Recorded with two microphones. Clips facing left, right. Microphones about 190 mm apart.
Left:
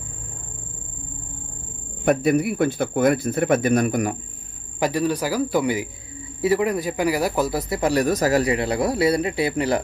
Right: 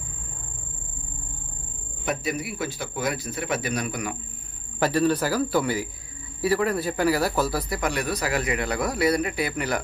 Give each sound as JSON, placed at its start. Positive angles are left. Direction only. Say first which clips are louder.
{"t": 2.0, "sound": "speech", "louder": "left 10 dB", "side_deg": 55}
{"t": 4.8, "sound": "a man's voice", "louder": "even", "side_deg": 15}